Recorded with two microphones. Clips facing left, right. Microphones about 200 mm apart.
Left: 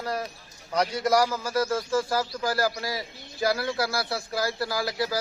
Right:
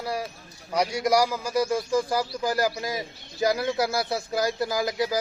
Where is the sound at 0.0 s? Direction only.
10° right (ahead or behind).